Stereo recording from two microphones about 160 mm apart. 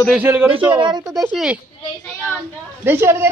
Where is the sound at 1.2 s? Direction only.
5° right (ahead or behind).